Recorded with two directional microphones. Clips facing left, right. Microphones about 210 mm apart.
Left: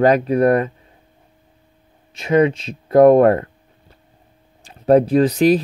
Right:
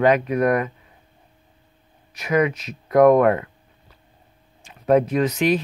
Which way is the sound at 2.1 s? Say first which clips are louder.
Left 5 dB; 25° left (ahead or behind).